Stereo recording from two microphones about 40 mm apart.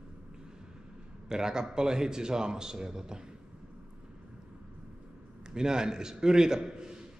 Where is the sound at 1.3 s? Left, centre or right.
Centre.